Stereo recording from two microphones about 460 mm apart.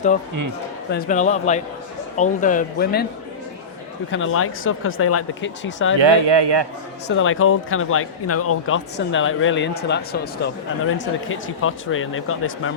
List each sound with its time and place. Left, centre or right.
0.9 s speech: centre
4.1 s speech: left
6.0 s speech: right
7.1 s speech: left